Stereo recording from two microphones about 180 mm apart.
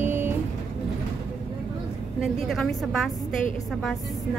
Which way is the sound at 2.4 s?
Centre (ahead or behind).